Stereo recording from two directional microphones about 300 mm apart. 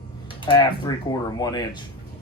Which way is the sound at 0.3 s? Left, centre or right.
Centre.